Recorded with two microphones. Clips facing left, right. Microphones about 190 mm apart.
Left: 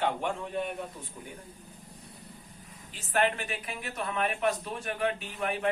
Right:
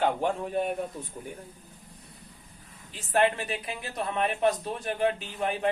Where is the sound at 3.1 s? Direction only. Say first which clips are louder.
Right 3 dB; 30° right (ahead or behind).